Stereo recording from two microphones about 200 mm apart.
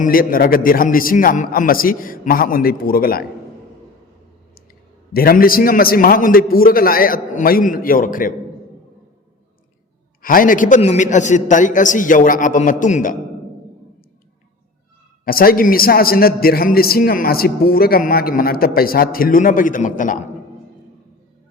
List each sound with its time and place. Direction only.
0.0 s a man's voice: 45° left (ahead or behind)
5.1 s a man's voice: 50° left (ahead or behind)
10.2 s a man's voice: 45° left (ahead or behind)
15.2 s a man's voice: 50° left (ahead or behind)